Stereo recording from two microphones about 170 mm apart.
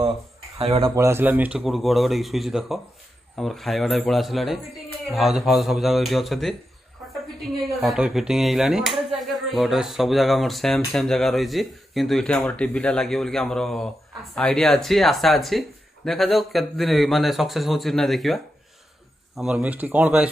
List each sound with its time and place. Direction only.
0.6 s speech: 35° right (ahead or behind)
0.9 s speech: 15° right (ahead or behind)